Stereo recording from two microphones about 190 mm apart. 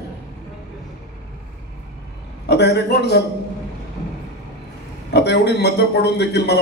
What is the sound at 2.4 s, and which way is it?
Speech, 60° left (ahead or behind).